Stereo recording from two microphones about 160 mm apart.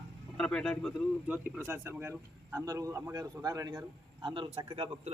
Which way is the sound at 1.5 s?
15° right (ahead or behind).